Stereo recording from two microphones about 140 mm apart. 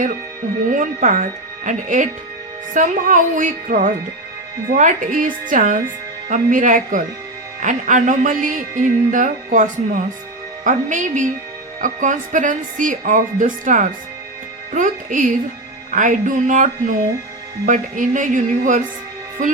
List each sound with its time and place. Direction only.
0.7 s music: 65° right (ahead or behind)
2.7 s speech: 65° right (ahead or behind)
7.6 s music: 65° right (ahead or behind)
11.8 s speech: 65° right (ahead or behind)
17.7 s speech: 65° right (ahead or behind)